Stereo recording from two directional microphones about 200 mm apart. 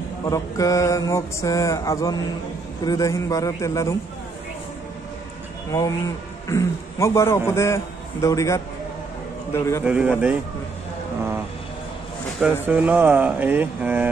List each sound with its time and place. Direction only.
0.3 s a man's voice: 15° left (ahead or behind)
5.7 s a man's voice: 15° left (ahead or behind)
9.8 s speech: 5° right (ahead or behind)
12.6 s speech: 5° right (ahead or behind)